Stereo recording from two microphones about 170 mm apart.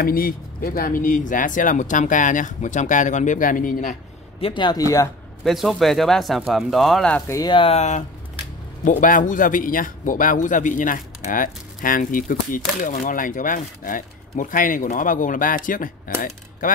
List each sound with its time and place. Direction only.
0.0 s a man's voice: 60° left (ahead or behind)
4.4 s speech: 30° left (ahead or behind)
5.4 s speech: centre (ahead or behind)
7.3 s a man's voice: 25° left (ahead or behind); by 15.9 s 50° left (ahead or behind)